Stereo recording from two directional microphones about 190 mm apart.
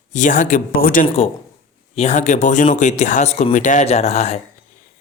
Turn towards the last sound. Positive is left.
turn(degrees=35)  # may be behind; listen again after turning